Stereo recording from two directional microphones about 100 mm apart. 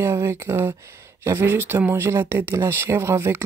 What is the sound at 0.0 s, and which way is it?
Speech, 25° right (ahead or behind).